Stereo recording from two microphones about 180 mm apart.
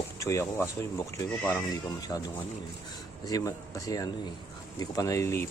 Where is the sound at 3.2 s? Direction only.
20° left (ahead or behind).